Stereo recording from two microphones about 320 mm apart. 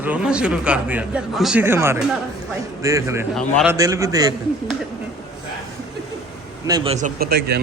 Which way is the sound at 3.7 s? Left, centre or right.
Centre.